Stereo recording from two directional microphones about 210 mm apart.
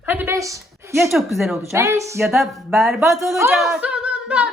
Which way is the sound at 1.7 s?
15° right (ahead or behind).